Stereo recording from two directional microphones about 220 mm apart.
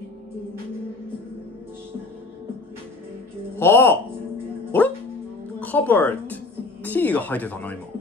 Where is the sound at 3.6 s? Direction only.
10° left (ahead or behind).